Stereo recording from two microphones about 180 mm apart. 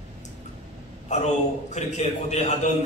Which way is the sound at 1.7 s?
40° left (ahead or behind).